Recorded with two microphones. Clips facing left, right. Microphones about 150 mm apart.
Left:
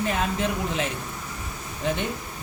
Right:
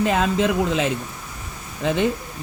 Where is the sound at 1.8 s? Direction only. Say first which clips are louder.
Right 4 dB; 90° right.